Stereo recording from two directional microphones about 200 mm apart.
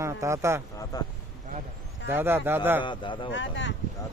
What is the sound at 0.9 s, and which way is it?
Speech, 20° left (ahead or behind).